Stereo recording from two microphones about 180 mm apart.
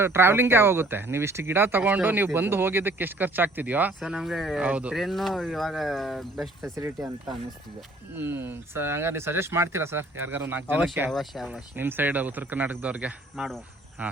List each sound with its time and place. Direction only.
0.0 s speech: 15° right (ahead or behind)
6.7 s speech: 20° right (ahead or behind)
8.1 s speech: 10° right (ahead or behind)
11.1 s speech: centre (ahead or behind)
11.8 s speech: 10° right (ahead or behind)